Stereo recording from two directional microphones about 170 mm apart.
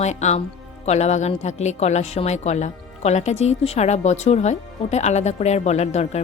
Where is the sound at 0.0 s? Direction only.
40° left (ahead or behind).